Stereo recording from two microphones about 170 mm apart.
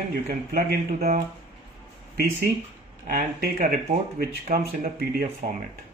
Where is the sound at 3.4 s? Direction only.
60° right (ahead or behind).